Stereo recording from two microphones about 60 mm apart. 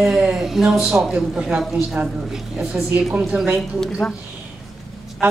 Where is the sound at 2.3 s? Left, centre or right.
Centre.